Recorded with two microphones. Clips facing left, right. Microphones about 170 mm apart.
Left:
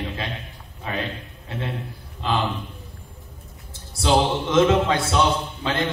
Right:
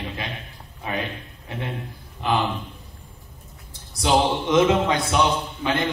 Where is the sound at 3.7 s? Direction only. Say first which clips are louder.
Even; 15° right (ahead or behind).